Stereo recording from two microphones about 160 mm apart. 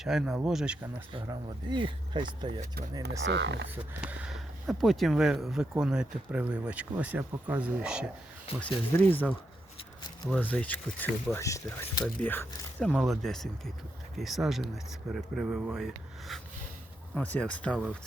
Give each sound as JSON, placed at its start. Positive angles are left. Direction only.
{"t": 0.0, "sound": "speech", "side_deg": 0}
{"t": 1.1, "sound": "speech", "side_deg": -30}
{"t": 3.0, "sound": "speech", "side_deg": -90}
{"t": 3.8, "sound": "speech", "side_deg": -10}
{"t": 8.5, "sound": "speech", "side_deg": 35}
{"t": 9.0, "sound": "speech", "side_deg": 10}
{"t": 12.9, "sound": "speech", "side_deg": 0}